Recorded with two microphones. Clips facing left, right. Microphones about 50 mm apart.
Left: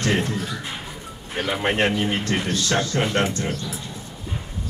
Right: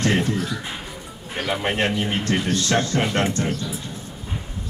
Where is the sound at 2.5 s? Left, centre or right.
Right.